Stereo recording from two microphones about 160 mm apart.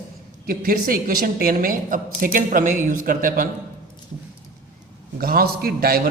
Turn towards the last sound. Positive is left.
turn(degrees=-70)  # may be behind; listen again after turning